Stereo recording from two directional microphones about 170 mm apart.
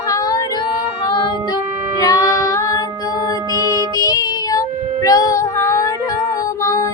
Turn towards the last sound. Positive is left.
turn(degrees=20)  # may be behind; listen again after turning